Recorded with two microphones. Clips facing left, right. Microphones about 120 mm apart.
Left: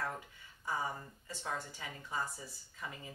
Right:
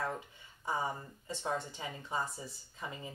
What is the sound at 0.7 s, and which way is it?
A woman's voice, 20° right (ahead or behind).